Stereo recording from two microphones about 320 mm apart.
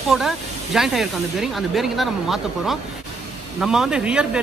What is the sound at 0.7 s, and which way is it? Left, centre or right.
Speech, centre.